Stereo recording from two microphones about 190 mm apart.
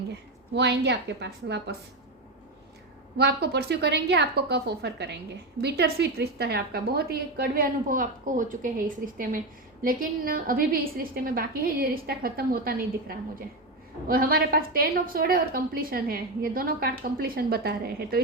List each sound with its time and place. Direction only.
0.1 s a woman's voice: 65° right (ahead or behind)
3.2 s a woman's voice: 60° right (ahead or behind); by 8.7 s 45° right (ahead or behind)
9.8 s a woman's voice: 50° right (ahead or behind)